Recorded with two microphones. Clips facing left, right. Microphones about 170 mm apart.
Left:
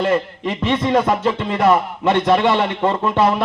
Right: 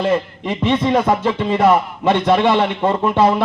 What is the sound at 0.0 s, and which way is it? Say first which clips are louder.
A man's voice: even; 20° right (ahead or behind).